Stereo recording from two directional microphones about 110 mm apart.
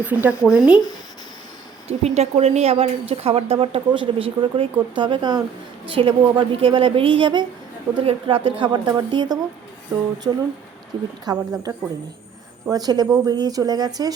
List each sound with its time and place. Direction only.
0.0 s speech: 15° right (ahead or behind)
1.9 s speech: 70° right (ahead or behind)
3.9 s a woman's voice: 50° right (ahead or behind)
5.9 s a woman's voice: 55° right (ahead or behind); by 11.7 s 35° right (ahead or behind)
12.7 s speech: 35° right (ahead or behind)